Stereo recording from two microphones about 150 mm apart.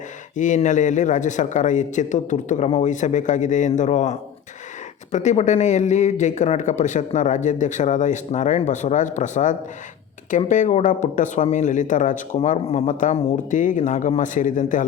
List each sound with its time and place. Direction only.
0.3 s speech: 55° left (ahead or behind)